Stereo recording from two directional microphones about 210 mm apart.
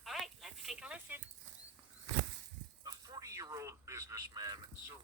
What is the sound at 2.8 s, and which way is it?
Speech, 20° right (ahead or behind).